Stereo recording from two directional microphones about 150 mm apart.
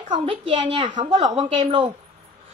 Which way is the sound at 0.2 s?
35° right (ahead or behind).